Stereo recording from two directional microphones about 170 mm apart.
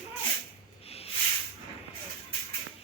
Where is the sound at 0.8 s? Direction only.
35° left (ahead or behind).